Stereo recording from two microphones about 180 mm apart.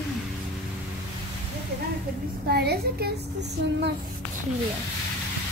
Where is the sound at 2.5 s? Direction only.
60° right (ahead or behind).